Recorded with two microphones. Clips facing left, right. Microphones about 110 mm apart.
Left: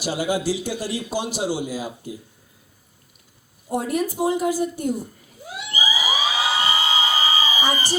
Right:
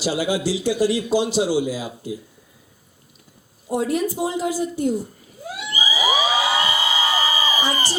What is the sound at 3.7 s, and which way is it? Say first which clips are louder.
A woman's voice: right 2 dB; 50° left (ahead or behind).